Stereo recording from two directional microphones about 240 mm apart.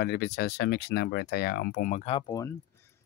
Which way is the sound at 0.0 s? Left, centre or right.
Left.